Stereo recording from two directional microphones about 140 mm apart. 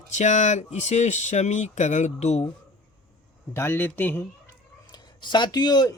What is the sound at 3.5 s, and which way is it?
Speech, 15° left (ahead or behind).